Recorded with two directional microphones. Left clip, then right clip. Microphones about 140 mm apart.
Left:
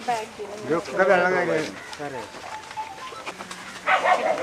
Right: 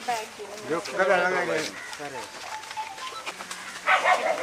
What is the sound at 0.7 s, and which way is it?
Speech, 30° left (ahead or behind).